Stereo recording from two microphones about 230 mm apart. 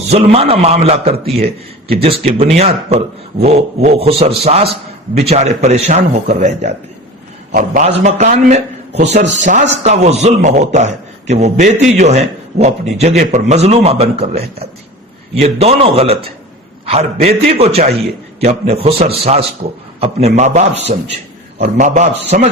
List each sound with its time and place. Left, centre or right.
0.1 s a man's voice: right
16.8 s a sound: right
17.2 s a man's voice: right